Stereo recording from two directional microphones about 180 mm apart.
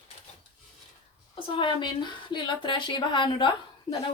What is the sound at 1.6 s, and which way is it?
A woman's voice, 25° left (ahead or behind).